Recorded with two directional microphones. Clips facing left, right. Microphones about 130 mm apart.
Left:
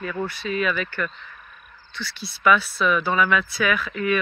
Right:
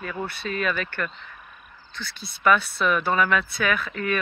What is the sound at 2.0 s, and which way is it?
Speech, 50° right (ahead or behind).